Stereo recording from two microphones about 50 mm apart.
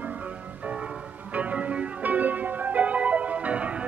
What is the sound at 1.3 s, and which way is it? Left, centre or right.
Music, right.